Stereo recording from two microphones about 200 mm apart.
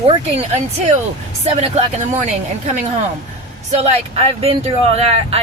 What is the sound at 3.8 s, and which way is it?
Speech, 30° right (ahead or behind).